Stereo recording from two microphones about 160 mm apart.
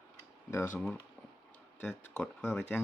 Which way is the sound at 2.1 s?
10° left (ahead or behind).